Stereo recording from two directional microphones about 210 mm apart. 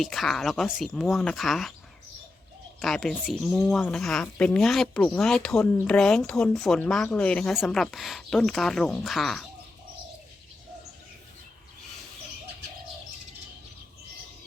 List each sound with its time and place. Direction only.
0.0 s speech: centre (ahead or behind)
2.8 s speech: centre (ahead or behind)